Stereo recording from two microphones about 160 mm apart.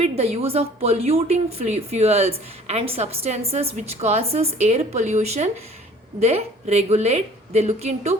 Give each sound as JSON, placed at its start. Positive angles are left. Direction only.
{"t": 0.0, "sound": "a woman's voice", "side_deg": -40}